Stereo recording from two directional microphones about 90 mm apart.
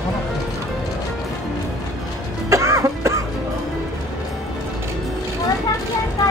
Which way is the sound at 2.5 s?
35° right (ahead or behind).